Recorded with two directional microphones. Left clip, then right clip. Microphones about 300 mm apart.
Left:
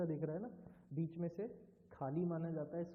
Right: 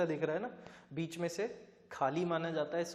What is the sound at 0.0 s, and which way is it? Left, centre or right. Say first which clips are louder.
A man's voice: right 8 dB; centre.